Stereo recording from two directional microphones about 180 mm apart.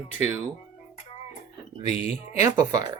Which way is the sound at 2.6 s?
20° right (ahead or behind).